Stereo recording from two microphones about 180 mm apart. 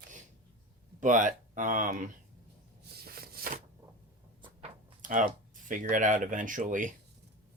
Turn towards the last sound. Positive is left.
turn(degrees=-45)  # may be behind; listen again after turning